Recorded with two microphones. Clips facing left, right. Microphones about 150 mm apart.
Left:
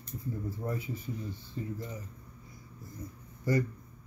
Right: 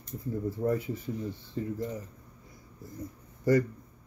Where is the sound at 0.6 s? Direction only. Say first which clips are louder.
Right 9 dB; 60° right (ahead or behind).